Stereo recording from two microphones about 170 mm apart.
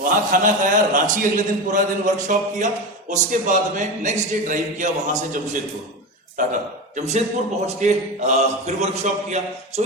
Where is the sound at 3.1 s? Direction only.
45° right (ahead or behind).